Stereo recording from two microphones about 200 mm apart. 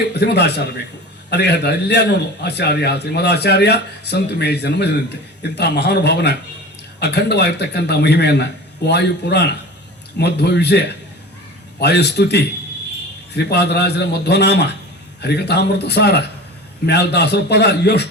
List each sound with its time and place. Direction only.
0.1 s a man's voice: 55° left (ahead or behind)